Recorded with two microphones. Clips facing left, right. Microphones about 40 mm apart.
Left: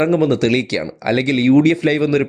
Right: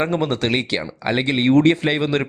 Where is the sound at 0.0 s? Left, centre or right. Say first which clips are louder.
Left 6 dB; right.